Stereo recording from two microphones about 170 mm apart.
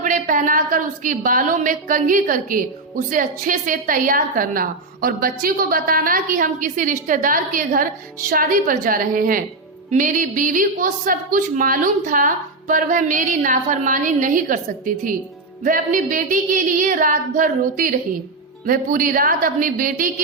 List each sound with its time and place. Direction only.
0.0 s a woman's voice: 50° right (ahead or behind)